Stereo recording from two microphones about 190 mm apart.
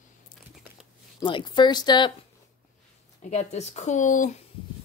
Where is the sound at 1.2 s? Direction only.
25° left (ahead or behind).